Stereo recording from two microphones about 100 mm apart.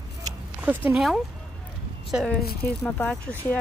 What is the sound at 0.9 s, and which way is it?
Speech, 5° right (ahead or behind).